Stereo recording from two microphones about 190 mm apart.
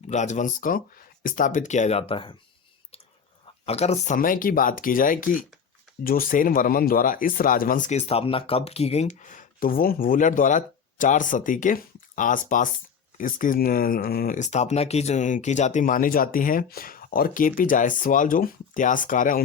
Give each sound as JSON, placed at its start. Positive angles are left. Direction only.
{"t": 0.1, "sound": "speech", "side_deg": 40}
{"t": 3.4, "sound": "speech", "side_deg": 35}